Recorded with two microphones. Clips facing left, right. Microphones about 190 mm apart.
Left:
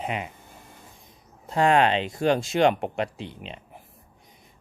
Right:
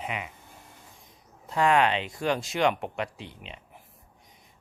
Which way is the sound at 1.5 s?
30° left (ahead or behind).